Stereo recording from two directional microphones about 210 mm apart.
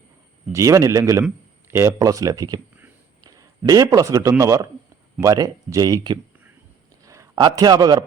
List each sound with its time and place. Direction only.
0.5 s a man's voice: 15° right (ahead or behind)